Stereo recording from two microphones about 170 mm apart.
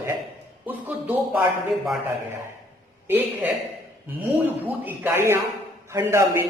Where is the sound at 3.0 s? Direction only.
10° right (ahead or behind).